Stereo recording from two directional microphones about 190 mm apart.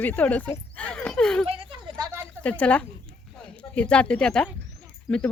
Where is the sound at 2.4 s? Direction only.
5° left (ahead or behind).